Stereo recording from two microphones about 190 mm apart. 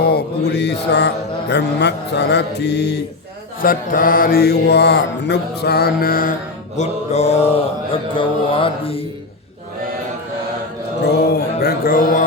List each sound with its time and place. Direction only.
0.0 s mantra: 55° left (ahead or behind)
3.6 s mantra: 50° left (ahead or behind)
6.7 s mantra: 35° left (ahead or behind)
11.0 s mantra: 55° left (ahead or behind)